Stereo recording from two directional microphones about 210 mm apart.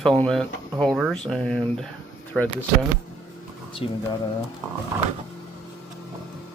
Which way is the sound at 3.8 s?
25° left (ahead or behind).